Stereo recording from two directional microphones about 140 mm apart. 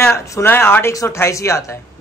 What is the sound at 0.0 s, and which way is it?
Speech, 15° left (ahead or behind).